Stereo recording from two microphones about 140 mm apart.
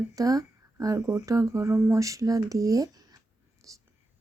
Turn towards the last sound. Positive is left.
turn(degrees=-25)  # may be behind; listen again after turning